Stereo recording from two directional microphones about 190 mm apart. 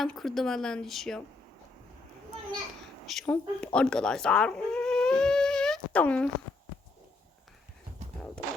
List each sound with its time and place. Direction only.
0.0 s speech: centre (ahead or behind)
3.1 s a sound: 5° left (ahead or behind)
8.4 s music: 50° right (ahead or behind)